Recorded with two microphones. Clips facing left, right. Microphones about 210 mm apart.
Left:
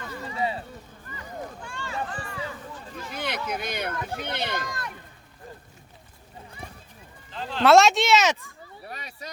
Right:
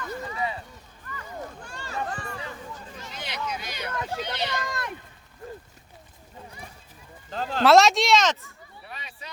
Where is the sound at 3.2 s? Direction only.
55° left (ahead or behind).